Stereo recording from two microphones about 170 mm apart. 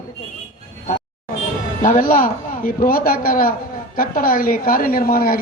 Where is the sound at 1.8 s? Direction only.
55° left (ahead or behind).